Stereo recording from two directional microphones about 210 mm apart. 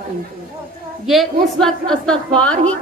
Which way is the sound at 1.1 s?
Centre (ahead or behind).